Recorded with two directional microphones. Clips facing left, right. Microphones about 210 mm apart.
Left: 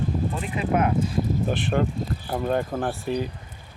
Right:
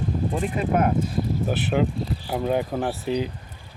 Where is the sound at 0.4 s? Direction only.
45° right (ahead or behind).